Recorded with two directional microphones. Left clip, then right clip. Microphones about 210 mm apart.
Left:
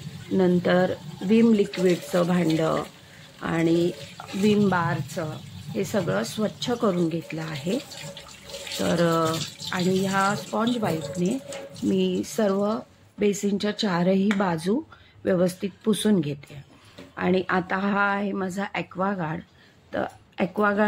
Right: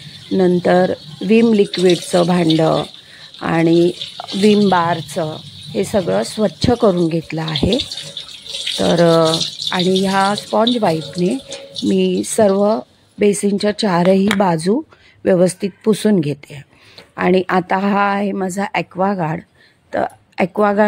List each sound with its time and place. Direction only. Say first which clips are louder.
0.4 s speech: right 8 dB; 40° right (ahead or behind)
8.7 s speech: right 10 dB; 40° right (ahead or behind)